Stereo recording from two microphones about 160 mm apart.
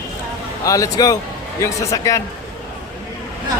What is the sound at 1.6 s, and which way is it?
Speech, 20° left (ahead or behind).